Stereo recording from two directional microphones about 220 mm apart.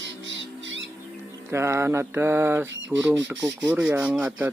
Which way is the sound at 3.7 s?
10° right (ahead or behind).